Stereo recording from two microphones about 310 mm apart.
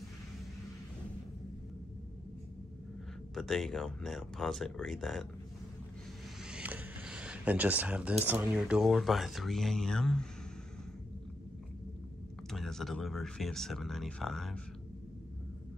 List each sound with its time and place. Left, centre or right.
3.3 s speech: centre
6.4 s a sound: centre
8.3 s speech: centre
12.4 s speech: centre